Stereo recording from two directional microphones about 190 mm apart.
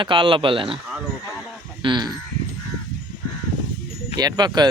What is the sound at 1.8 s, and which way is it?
Sheep, 25° right (ahead or behind).